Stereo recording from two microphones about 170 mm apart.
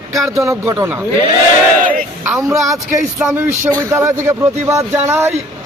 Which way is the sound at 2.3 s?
15° right (ahead or behind).